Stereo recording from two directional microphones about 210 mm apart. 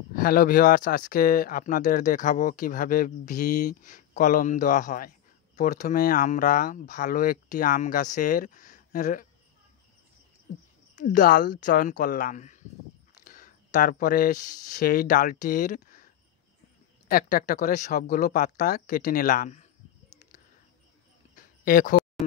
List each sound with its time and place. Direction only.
0.1 s speech: 45° left (ahead or behind)
11.0 s speech: 40° left (ahead or behind)
17.1 s speech: 40° left (ahead or behind)
21.6 s speech: 40° left (ahead or behind)